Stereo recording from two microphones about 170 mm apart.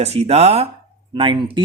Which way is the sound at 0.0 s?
40° right (ahead or behind).